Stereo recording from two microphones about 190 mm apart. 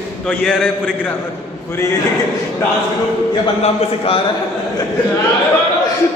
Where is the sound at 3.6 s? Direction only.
30° left (ahead or behind).